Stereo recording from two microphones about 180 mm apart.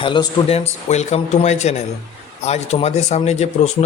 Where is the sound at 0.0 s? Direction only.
25° left (ahead or behind).